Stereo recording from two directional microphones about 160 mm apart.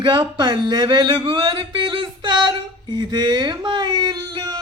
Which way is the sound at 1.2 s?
30° right (ahead or behind).